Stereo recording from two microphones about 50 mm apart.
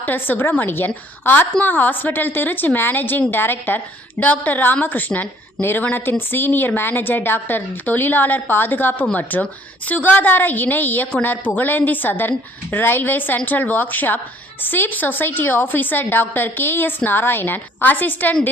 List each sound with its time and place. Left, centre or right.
0.0 s a woman's voice: left
4.2 s a woman's voice: left